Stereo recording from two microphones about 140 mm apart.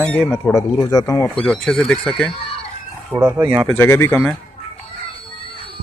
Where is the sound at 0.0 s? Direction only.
5° left (ahead or behind).